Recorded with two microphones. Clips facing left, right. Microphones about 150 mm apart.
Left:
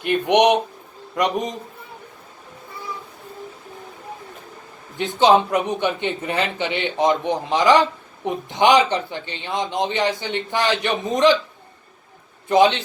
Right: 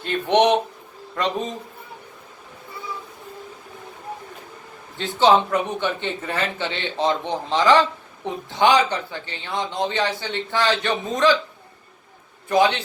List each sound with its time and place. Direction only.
0.0 s speech: 15° left (ahead or behind)
4.9 s speech: 15° left (ahead or behind)
12.5 s a man's voice: 20° left (ahead or behind)